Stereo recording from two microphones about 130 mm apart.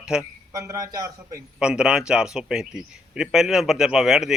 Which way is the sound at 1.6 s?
5° right (ahead or behind).